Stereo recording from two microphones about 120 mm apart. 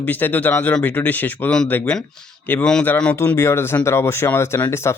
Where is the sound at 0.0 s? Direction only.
15° left (ahead or behind).